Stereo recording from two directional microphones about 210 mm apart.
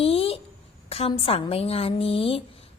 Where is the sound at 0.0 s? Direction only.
25° left (ahead or behind).